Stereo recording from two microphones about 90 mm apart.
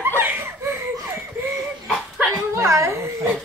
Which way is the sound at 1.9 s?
Centre (ahead or behind).